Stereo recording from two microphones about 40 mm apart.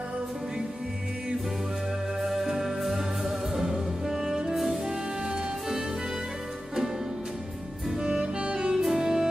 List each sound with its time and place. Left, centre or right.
2.2 s music: centre
8.0 s music: centre